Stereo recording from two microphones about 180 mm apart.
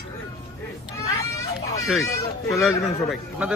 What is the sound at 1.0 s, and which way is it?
Children playing, 15° left (ahead or behind).